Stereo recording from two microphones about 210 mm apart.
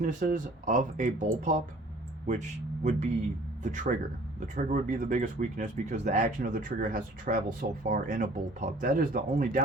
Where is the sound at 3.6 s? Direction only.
35° right (ahead or behind).